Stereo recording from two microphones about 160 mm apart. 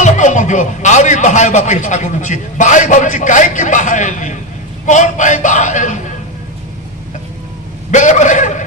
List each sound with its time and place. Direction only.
0.0 s a man's voice: 50° left (ahead or behind)
7.9 s a man's voice: 50° left (ahead or behind)